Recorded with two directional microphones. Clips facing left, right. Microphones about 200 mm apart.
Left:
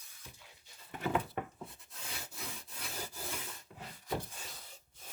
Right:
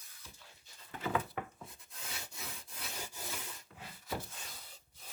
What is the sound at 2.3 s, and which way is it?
Sawing, centre (ahead or behind).